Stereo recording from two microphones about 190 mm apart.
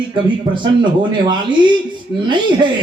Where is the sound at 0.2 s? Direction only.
25° right (ahead or behind).